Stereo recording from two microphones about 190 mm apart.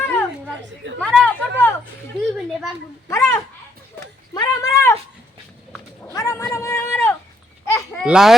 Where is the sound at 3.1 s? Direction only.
15° left (ahead or behind).